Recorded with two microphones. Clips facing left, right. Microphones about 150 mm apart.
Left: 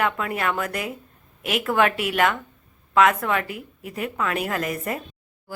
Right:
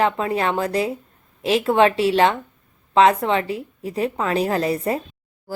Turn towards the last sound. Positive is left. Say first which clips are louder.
# right 6 dB
turn(degrees=-30)  # may be behind; listen again after turning